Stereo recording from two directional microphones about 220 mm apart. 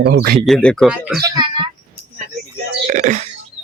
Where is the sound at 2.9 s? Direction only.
35° right (ahead or behind).